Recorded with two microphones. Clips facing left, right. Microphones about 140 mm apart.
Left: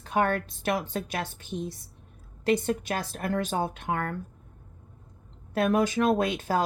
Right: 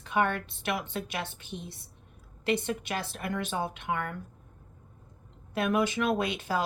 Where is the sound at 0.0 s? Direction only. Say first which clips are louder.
Left 2 dB; 40° left (ahead or behind).